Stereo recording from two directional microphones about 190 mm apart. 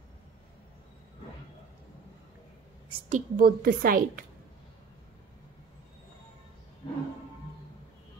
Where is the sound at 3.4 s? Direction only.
50° right (ahead or behind).